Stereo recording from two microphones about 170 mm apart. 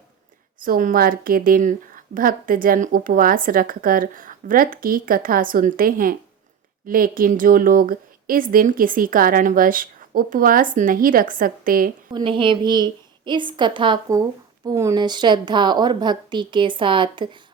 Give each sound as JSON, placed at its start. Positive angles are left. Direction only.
{"t": 0.6, "sound": "a woman's voice", "side_deg": -55}
{"t": 12.1, "sound": "a woman's voice", "side_deg": -30}